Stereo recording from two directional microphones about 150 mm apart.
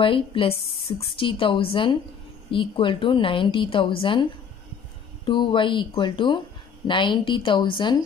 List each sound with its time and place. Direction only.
0.0 s a woman's voice: 35° left (ahead or behind)